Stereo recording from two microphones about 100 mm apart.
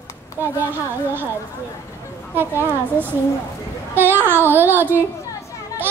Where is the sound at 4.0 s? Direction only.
20° right (ahead or behind).